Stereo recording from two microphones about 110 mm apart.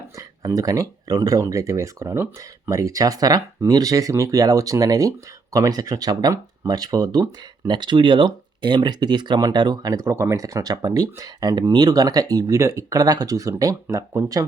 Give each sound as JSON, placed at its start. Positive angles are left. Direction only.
{"t": 0.2, "sound": "speech", "side_deg": -35}